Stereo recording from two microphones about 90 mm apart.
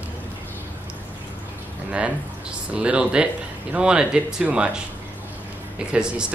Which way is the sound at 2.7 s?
10° right (ahead or behind).